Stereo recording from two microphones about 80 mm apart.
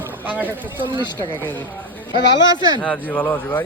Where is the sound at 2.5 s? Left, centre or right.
Right.